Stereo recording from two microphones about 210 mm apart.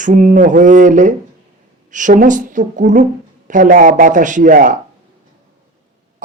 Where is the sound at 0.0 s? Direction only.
35° right (ahead or behind).